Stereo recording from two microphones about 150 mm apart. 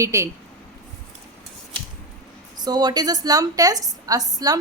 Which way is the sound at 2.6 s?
25° right (ahead or behind).